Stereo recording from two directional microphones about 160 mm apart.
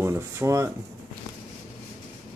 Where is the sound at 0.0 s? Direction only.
15° right (ahead or behind).